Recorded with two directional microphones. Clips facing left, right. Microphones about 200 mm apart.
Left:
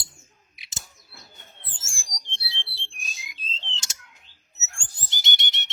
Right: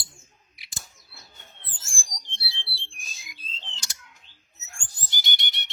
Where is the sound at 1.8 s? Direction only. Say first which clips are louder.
Right 1 dB; 25° left (ahead or behind).